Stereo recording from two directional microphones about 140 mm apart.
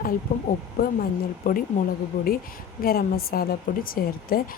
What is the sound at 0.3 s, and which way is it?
Speech, 65° left (ahead or behind).